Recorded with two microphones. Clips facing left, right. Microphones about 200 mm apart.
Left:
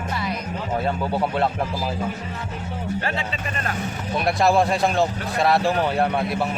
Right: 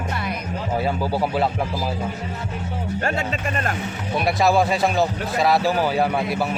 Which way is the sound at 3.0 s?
45° right (ahead or behind).